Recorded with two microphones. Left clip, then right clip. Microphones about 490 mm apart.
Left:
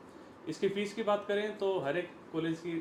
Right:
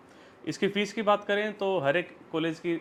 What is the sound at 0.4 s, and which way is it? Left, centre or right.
Speech, right.